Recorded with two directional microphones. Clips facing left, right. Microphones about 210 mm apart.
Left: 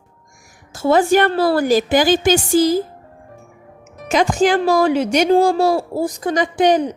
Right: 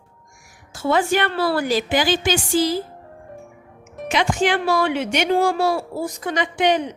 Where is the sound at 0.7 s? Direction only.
40° left (ahead or behind).